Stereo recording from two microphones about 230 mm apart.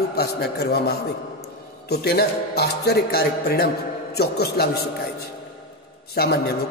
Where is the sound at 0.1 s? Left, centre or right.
Left.